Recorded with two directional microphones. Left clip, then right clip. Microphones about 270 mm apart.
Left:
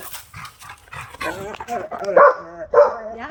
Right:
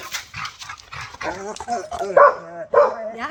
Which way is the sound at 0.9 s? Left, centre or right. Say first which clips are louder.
Left 1 dB; right.